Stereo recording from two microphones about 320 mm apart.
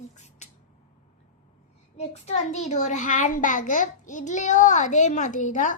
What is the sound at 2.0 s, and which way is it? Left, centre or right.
A child's voice, left.